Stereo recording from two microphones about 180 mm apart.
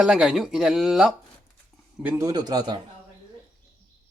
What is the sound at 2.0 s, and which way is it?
Speech, 20° right (ahead or behind).